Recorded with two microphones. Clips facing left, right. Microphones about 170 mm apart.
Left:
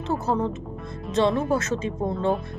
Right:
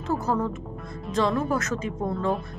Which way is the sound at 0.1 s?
25° left (ahead or behind).